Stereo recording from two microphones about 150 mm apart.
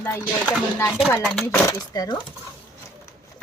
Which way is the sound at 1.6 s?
25° left (ahead or behind).